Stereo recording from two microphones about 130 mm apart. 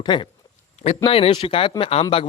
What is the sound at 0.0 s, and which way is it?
A man's voice, 35° left (ahead or behind).